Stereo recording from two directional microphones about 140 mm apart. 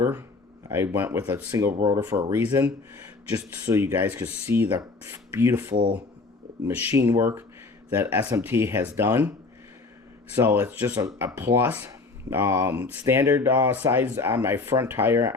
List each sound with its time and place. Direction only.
0.0 s speech: 15° right (ahead or behind)
2.3 s speech: 15° right (ahead or behind)
6.9 s speech: 20° right (ahead or behind)
10.3 s speech: 15° right (ahead or behind)